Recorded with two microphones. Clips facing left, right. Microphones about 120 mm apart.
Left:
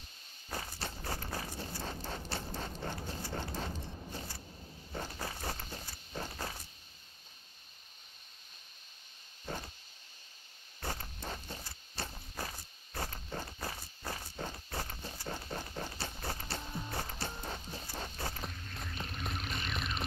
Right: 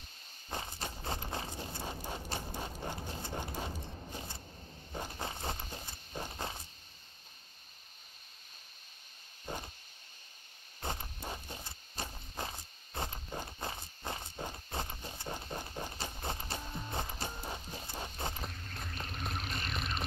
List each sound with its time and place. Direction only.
0.5 s clip-clop: 20° right (ahead or behind)
4.9 s walk: 20° right (ahead or behind)
9.5 s vehicle: 15° right (ahead or behind)
10.8 s a sound: 20° right (ahead or behind)
16.9 s music: 20° right (ahead or behind)
19.5 s a sound: centre (ahead or behind)